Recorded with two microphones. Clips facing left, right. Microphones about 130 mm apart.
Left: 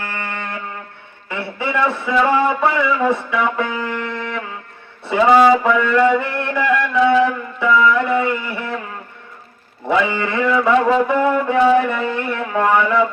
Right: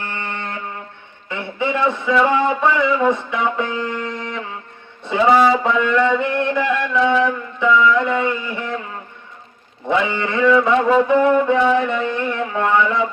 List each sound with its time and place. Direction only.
0.0 s music: 20° right (ahead or behind)
1.3 s a man's voice: 20° right (ahead or behind)
5.6 s mantra: 20° right (ahead or behind)
10.2 s mantra: 20° right (ahead or behind)